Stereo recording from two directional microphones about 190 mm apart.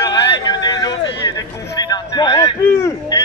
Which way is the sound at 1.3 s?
20° left (ahead or behind).